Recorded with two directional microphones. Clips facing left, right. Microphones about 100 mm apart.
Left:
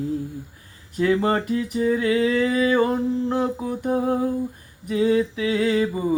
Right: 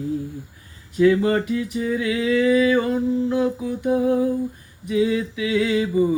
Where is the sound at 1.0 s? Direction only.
40° left (ahead or behind).